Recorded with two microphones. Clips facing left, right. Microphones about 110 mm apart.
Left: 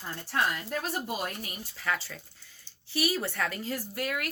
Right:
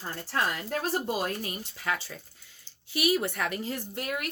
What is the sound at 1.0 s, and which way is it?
Speech, 30° right (ahead or behind).